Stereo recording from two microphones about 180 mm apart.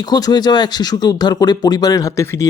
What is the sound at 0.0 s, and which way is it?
Speech, 20° left (ahead or behind).